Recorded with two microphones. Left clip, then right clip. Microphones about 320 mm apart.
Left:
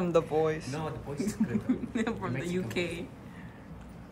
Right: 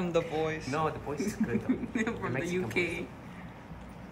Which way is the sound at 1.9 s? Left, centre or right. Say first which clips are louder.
Even; centre.